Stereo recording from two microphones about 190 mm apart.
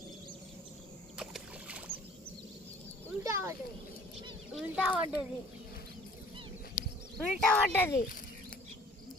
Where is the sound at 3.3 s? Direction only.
15° right (ahead or behind).